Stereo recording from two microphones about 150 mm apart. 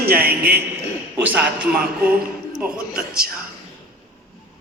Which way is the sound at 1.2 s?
10° right (ahead or behind).